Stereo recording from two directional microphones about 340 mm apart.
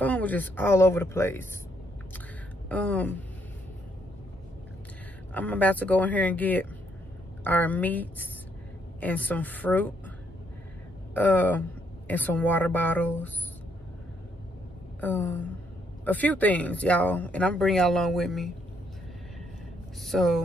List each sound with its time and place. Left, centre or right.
0.0 s speech: centre
2.7 s speech: centre
5.3 s speech: centre
11.1 s speech: centre
15.0 s speech: centre
20.0 s speech: centre